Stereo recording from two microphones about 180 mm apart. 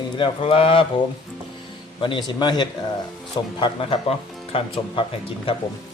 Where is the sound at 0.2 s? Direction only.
30° left (ahead or behind).